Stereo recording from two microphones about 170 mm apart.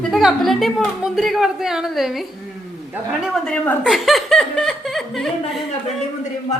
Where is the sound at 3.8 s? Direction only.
Centre (ahead or behind).